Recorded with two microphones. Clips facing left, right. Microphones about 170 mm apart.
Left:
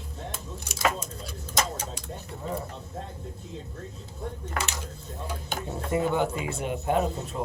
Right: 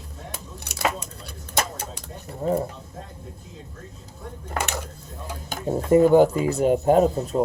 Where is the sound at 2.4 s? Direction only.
45° right (ahead or behind).